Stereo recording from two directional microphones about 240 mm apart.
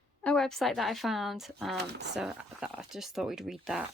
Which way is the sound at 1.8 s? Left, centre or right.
Right.